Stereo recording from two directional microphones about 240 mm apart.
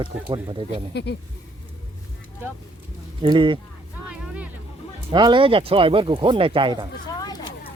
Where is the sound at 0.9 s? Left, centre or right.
Left.